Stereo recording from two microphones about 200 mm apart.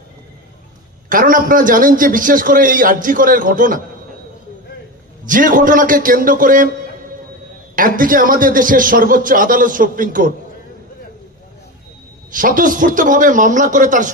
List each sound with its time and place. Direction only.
1.0 s a man's voice: 45° right (ahead or behind)
5.2 s a man's voice: 40° right (ahead or behind)
7.7 s a man's voice: 45° right (ahead or behind)
12.3 s a man's voice: 45° right (ahead or behind)